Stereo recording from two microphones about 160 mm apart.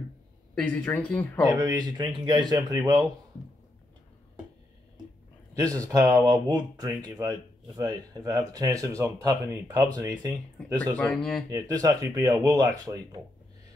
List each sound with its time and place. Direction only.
0.6 s speech: 5° left (ahead or behind)
1.6 s speech: 25° right (ahead or behind)
5.5 s speech: 20° right (ahead or behind)
11.0 s speech: 5° left (ahead or behind)
11.5 s speech: 20° right (ahead or behind)